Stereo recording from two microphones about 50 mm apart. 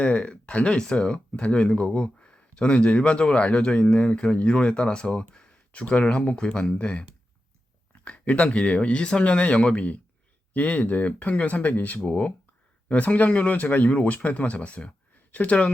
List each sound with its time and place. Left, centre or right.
0.0 s speech: left
5.8 s speech: left
8.0 s speech: left
15.1 s a sound: left